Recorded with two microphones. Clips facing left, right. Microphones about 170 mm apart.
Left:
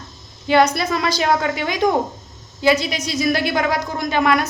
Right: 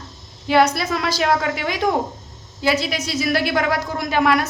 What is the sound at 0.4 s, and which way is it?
A woman's voice, 5° right (ahead or behind).